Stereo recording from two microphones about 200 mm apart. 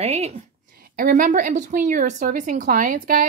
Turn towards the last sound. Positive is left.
turn(degrees=-40)  # may be behind; listen again after turning